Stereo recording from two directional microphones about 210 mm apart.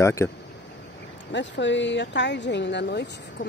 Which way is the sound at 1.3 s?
60° left (ahead or behind).